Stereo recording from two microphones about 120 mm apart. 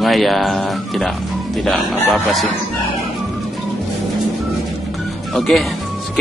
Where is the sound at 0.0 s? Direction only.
Centre (ahead or behind).